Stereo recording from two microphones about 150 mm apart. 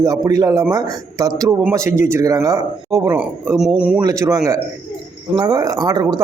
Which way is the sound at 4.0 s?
25° right (ahead or behind).